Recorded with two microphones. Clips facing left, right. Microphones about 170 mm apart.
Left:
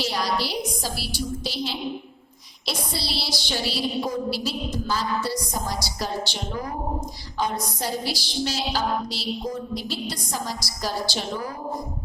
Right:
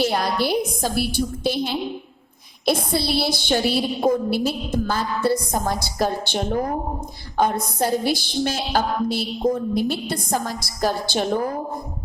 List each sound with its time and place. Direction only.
0.0 s a woman's voice: 55° right (ahead or behind)